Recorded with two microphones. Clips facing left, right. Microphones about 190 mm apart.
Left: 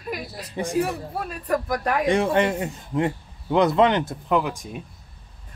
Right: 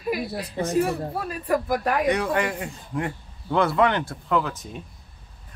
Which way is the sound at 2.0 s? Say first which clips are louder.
Left 3 dB; 25° left (ahead or behind).